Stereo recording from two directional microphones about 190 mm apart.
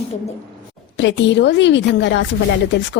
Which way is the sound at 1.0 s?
70° left (ahead or behind).